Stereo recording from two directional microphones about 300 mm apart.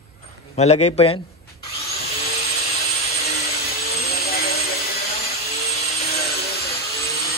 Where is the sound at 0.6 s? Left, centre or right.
Centre.